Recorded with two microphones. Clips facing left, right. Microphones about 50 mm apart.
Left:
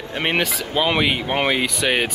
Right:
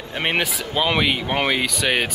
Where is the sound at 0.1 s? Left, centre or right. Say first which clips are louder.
Left 1 dB; centre.